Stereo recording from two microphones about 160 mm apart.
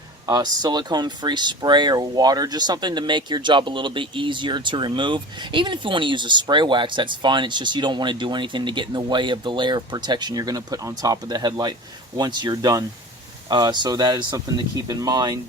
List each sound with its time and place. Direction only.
0.3 s speech: 25° right (ahead or behind)